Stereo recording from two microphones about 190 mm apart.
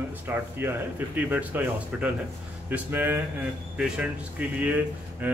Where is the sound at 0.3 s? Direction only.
10° right (ahead or behind).